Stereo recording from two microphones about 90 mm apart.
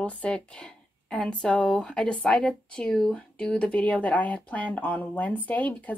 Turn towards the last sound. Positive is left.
turn(degrees=20)  # may be behind; listen again after turning